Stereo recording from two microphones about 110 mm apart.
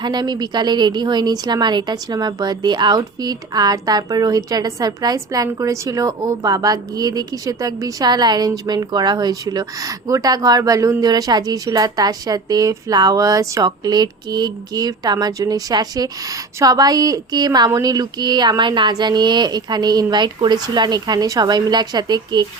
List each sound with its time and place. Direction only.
0.0 s a woman's voice: 40° right (ahead or behind)